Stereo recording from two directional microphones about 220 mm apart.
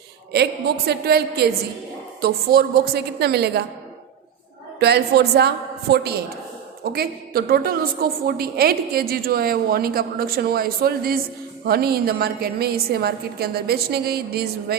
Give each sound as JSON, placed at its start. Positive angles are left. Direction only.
{"t": 0.3, "sound": "a woman's voice", "side_deg": -50}
{"t": 4.8, "sound": "a woman's voice", "side_deg": -50}